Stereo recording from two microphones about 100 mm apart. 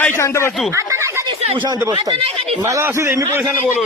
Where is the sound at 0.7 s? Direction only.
25° right (ahead or behind).